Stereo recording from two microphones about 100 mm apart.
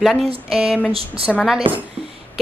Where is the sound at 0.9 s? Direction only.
70° right (ahead or behind).